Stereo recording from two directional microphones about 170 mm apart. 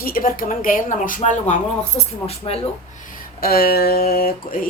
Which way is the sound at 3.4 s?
65° left (ahead or behind).